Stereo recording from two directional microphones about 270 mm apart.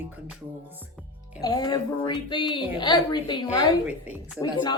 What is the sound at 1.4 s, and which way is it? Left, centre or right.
A woman's voice, centre.